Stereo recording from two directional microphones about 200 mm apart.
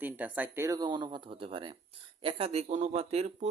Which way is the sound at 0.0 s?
10° right (ahead or behind).